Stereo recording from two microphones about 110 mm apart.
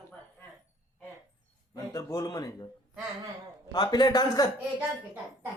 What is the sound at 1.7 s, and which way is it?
Speech, 35° left (ahead or behind).